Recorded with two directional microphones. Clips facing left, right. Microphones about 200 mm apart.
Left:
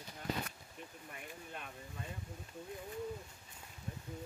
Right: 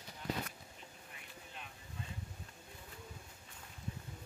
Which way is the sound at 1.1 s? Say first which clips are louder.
Left 7 dB; 55° left (ahead or behind).